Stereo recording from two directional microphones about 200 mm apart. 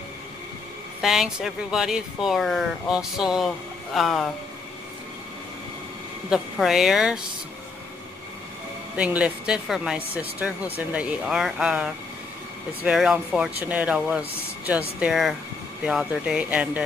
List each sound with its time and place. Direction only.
1.0 s speech: centre (ahead or behind)
6.3 s speech: centre (ahead or behind)
8.9 s speech: 5° right (ahead or behind)